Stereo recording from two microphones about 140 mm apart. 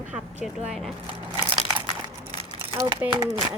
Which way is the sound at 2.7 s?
25° right (ahead or behind).